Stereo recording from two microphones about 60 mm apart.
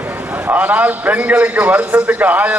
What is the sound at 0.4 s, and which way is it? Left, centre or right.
A man's voice, right.